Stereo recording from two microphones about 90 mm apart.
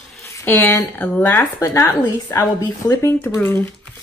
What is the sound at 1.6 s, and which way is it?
Speech, 30° left (ahead or behind).